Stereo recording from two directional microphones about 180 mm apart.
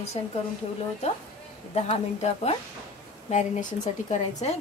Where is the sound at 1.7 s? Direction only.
35° left (ahead or behind).